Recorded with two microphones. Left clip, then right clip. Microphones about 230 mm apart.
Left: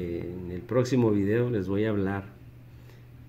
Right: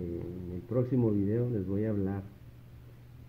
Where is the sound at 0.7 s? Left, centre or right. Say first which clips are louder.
Left 6 dB; centre.